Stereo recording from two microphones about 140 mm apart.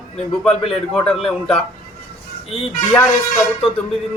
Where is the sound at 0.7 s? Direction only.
Centre (ahead or behind).